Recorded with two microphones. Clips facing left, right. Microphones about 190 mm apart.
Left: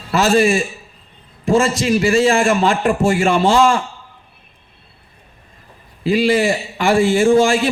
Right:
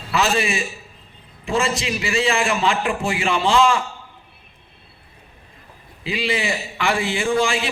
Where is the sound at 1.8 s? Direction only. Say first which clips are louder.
Left 8 dB; 45° left (ahead or behind).